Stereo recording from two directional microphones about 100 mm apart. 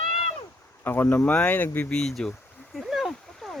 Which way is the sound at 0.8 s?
20° left (ahead or behind).